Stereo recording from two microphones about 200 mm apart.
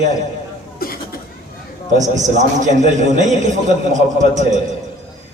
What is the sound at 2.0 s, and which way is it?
A man's voice, 35° right (ahead or behind).